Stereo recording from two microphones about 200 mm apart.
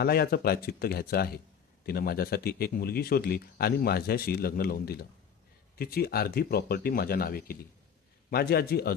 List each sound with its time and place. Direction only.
0.0 s speech: 50° left (ahead or behind)